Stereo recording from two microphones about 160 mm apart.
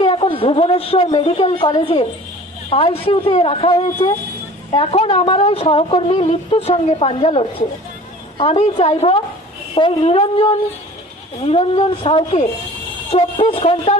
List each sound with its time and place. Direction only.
0.0 s a man's voice: 35° left (ahead or behind)
11.4 s a woman's voice: 35° left (ahead or behind)